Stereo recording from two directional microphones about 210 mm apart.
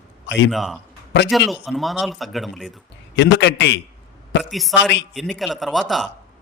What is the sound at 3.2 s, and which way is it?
Speech, 55° left (ahead or behind).